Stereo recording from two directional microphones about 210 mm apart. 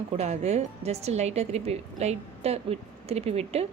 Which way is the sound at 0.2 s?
30° right (ahead or behind).